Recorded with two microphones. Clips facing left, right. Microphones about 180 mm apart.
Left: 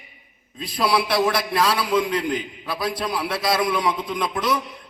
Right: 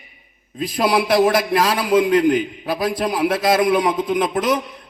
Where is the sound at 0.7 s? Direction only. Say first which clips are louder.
Right 4 dB; 45° right (ahead or behind).